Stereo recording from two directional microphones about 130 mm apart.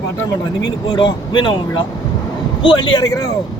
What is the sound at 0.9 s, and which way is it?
Speech, 35° left (ahead or behind).